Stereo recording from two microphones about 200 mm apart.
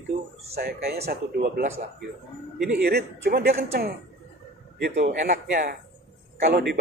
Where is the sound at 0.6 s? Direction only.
50° right (ahead or behind).